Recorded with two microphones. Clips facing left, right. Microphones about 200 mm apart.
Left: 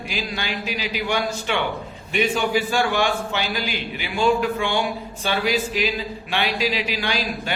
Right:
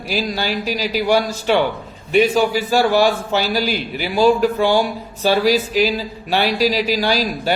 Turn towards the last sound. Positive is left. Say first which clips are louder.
# right 7 dB
turn(degrees=-40)  # may be behind; listen again after turning